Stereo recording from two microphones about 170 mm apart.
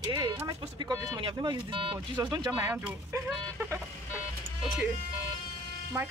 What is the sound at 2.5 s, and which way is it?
Speech, 15° right (ahead or behind).